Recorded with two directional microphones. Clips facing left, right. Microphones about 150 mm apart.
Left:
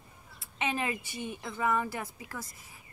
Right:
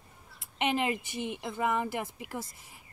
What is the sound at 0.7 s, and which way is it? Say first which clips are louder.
Speech: right 3 dB; 20° right (ahead or behind).